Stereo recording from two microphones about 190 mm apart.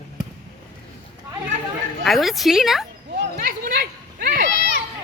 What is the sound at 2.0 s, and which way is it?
Speech, centre (ahead or behind).